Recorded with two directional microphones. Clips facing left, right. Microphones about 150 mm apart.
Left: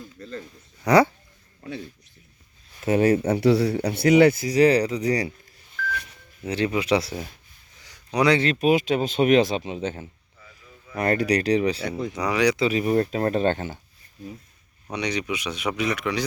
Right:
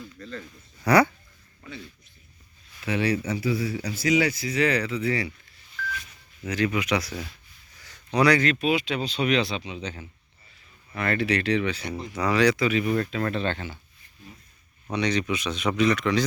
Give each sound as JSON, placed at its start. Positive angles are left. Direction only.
{"t": 0.9, "sound": "dog", "side_deg": 25}
{"t": 1.6, "sound": "speech", "side_deg": 50}
{"t": 4.4, "sound": "speech", "side_deg": 35}
{"t": 6.4, "sound": "speech", "side_deg": 30}
{"t": 7.8, "sound": "a sound", "side_deg": 15}
{"t": 8.6, "sound": "speech", "side_deg": 45}
{"t": 12.1, "sound": "speech", "side_deg": 15}
{"t": 12.5, "sound": "speech", "side_deg": 35}
{"t": 14.9, "sound": "speech", "side_deg": 15}